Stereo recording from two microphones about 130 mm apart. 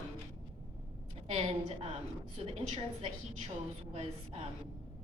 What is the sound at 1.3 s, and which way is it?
A woman's voice, 50° right (ahead or behind).